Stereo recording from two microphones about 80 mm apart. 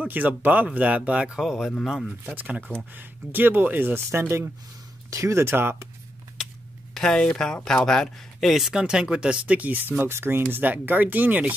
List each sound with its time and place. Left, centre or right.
0.0 s speech: right
1.4 s speech: centre
2.3 s speech: centre
6.4 s speech: centre; by 11.5 s right